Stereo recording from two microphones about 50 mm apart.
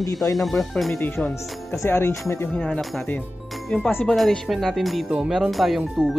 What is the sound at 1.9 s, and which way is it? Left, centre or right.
Speech, left.